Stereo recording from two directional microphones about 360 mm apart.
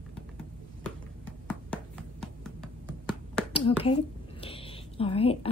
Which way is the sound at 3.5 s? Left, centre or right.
Centre.